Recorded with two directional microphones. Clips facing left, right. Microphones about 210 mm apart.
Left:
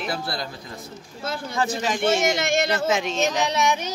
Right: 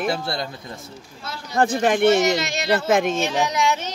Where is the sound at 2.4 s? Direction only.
50° left (ahead or behind).